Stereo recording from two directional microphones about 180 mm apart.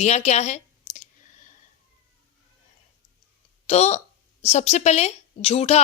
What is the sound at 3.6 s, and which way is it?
A woman's voice, 35° left (ahead or behind).